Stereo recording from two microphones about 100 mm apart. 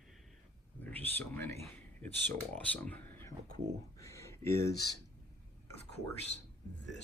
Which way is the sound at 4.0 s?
30° left (ahead or behind).